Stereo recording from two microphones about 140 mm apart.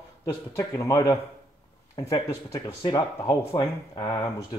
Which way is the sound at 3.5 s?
35° left (ahead or behind).